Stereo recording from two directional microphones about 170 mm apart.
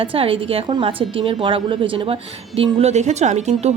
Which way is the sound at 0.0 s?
35° right (ahead or behind).